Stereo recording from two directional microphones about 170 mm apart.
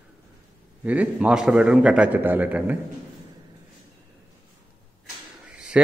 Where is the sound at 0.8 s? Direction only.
10° right (ahead or behind).